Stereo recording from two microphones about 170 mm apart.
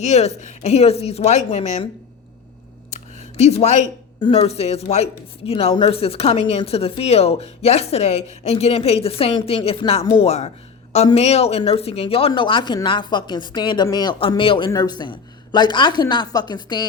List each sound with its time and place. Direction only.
0.0 s speech: 40° left (ahead or behind)
3.3 s speech: 40° left (ahead or behind)